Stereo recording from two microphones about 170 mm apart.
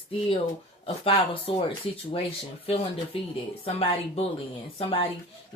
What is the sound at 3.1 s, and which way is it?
Speech, 30° left (ahead or behind).